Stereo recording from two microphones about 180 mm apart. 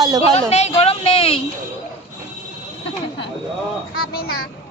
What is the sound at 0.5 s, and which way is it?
Speech, 35° left (ahead or behind).